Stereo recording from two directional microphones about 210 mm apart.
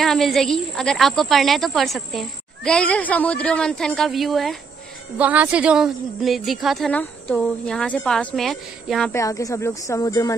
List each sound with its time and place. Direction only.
0.0 s speech: centre (ahead or behind)
9.1 s speech: 15° left (ahead or behind)